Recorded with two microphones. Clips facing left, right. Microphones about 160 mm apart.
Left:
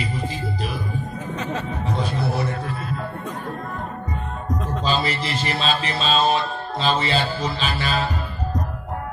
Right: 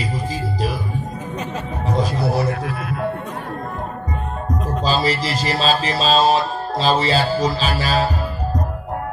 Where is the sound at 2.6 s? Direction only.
65° right (ahead or behind).